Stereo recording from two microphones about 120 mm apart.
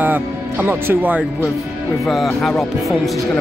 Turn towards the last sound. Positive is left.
turn(degrees=0)  # may be behind; listen again after turning